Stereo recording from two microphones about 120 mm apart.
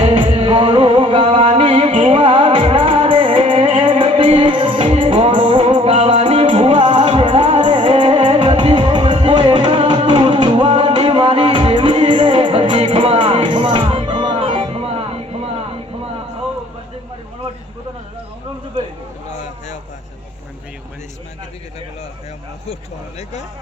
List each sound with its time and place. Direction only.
0.1 s music: 50° right (ahead or behind); by 6.4 s 65° right (ahead or behind)
6.5 s music: 75° right (ahead or behind)
6.7 s music: 50° right (ahead or behind)